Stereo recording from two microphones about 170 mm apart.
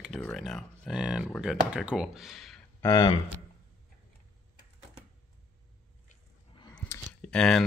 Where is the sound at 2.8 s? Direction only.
20° left (ahead or behind).